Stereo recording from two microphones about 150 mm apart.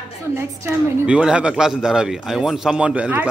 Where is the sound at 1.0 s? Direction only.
5° right (ahead or behind).